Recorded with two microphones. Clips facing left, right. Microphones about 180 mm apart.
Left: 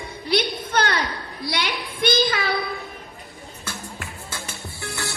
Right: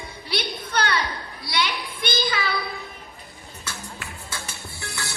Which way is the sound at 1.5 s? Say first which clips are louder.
Right 1 dB; 55° left (ahead or behind).